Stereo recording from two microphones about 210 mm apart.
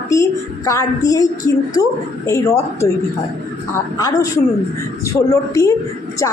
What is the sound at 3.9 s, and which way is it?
A woman's voice, 20° left (ahead or behind).